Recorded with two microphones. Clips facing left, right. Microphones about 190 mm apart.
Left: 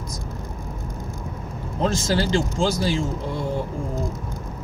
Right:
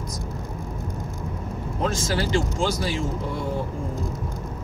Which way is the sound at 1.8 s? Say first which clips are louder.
Left 3 dB; 30° left (ahead or behind).